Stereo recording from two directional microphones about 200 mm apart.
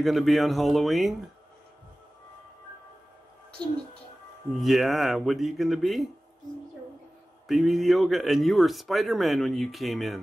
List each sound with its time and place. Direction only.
0.0 s speech: centre (ahead or behind)
4.6 s speech: centre (ahead or behind)
7.4 s speech: centre (ahead or behind)